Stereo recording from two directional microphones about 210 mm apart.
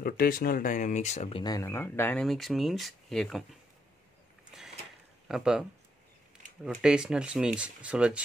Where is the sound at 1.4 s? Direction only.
15° left (ahead or behind).